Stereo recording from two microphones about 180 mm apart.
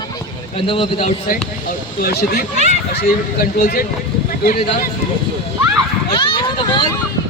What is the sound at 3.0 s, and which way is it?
Speech, 55° left (ahead or behind).